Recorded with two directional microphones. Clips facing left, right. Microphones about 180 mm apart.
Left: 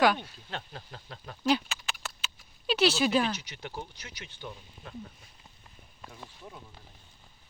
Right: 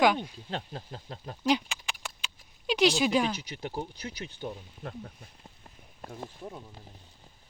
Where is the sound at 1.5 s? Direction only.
15° right (ahead or behind).